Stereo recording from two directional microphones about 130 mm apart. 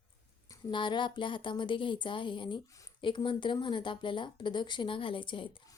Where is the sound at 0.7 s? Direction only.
35° left (ahead or behind).